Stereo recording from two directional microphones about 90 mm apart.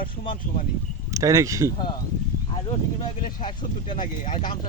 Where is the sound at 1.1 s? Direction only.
35° right (ahead or behind).